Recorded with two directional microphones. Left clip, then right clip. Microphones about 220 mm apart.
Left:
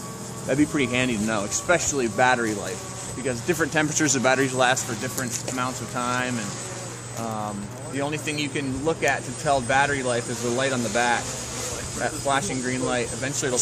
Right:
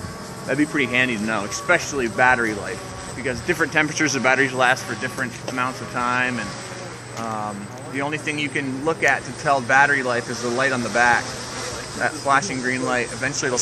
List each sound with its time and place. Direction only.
0.5 s speech: 40° left (ahead or behind)
7.9 s speech: 35° left (ahead or behind)